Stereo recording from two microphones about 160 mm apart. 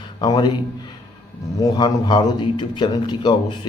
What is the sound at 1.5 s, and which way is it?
A man's voice, 25° left (ahead or behind).